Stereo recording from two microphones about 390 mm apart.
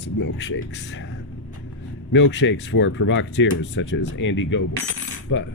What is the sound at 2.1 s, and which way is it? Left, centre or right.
Speech, left.